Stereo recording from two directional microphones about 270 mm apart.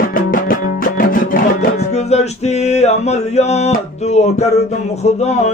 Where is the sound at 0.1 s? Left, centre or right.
Left.